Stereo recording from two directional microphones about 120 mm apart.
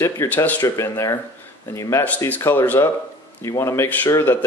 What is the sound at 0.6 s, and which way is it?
A man's voice, 30° left (ahead or behind).